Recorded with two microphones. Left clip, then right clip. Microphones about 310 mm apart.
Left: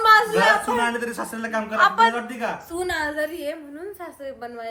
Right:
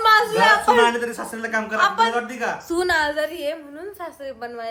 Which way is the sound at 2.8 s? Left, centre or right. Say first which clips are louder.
Right 6 dB; right.